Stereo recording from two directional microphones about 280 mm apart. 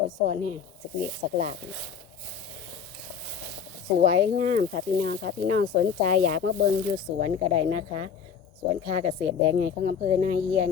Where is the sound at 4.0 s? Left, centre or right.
Right.